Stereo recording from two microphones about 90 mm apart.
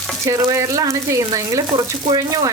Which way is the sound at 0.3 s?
35° right (ahead or behind).